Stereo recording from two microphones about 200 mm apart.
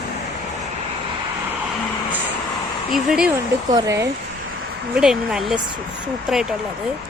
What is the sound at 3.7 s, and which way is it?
Speech, 15° right (ahead or behind).